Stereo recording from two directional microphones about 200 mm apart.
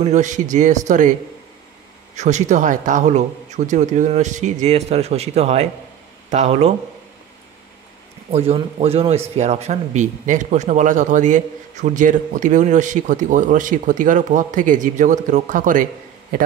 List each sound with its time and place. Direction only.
0.0 s speech: 35° right (ahead or behind)
2.1 s speech: 35° right (ahead or behind)
8.3 s speech: 30° right (ahead or behind)